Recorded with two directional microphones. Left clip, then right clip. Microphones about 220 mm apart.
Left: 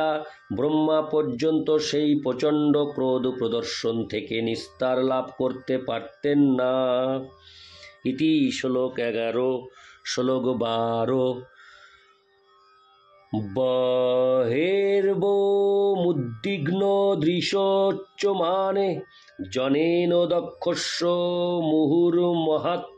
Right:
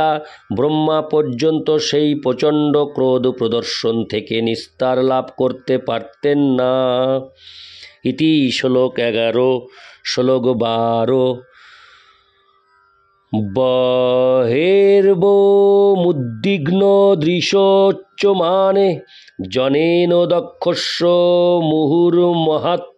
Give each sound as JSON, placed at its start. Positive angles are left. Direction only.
{"t": 0.0, "sound": "speech", "side_deg": -45}
{"t": 13.3, "sound": "speech", "side_deg": -45}